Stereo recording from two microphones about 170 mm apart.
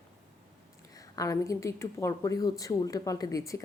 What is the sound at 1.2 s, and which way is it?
A woman's voice, 20° left (ahead or behind).